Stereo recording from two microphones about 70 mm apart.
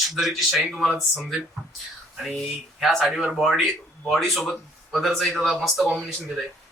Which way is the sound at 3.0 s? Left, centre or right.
Centre.